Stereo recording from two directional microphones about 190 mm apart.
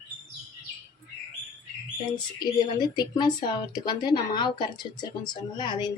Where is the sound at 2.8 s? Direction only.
20° left (ahead or behind).